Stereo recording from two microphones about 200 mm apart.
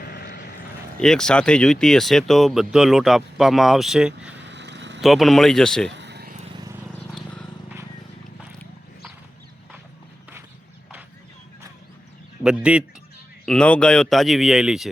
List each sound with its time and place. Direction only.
0.0 s vehicle: 55° left (ahead or behind)
0.9 s speech: 5° left (ahead or behind)
4.4 s vehicle: 60° right (ahead or behind)
4.9 s speech: centre (ahead or behind)
5.9 s vehicle: 60° right (ahead or behind)
7.1 s a sound: 5° left (ahead or behind)
12.4 s speech: 5° right (ahead or behind)